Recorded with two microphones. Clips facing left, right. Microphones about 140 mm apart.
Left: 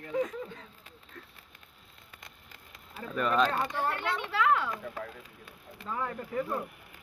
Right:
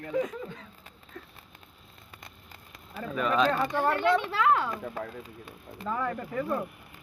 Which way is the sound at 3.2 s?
Centre (ahead or behind).